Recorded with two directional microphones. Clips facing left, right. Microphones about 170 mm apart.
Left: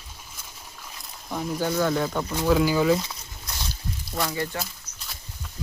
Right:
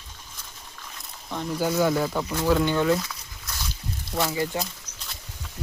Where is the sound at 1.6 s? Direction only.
5° right (ahead or behind).